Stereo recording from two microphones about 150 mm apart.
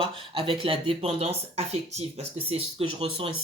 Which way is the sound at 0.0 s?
35° right (ahead or behind).